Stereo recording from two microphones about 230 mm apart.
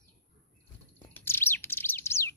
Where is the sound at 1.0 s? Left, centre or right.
Centre.